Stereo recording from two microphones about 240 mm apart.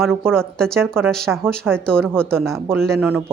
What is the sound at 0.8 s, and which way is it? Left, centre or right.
A woman's voice, centre.